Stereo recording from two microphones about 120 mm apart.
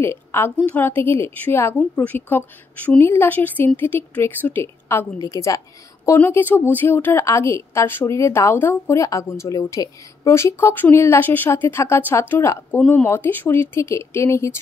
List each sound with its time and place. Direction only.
0.0 s a woman's voice: 20° left (ahead or behind)